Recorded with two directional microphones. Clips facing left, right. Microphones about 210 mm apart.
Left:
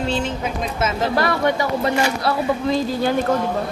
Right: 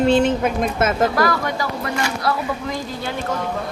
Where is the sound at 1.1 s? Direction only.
25° left (ahead or behind).